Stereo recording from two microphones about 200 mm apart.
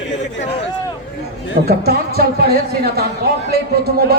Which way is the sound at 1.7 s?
50° right (ahead or behind).